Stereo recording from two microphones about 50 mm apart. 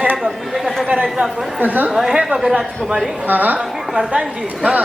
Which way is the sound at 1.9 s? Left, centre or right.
Centre.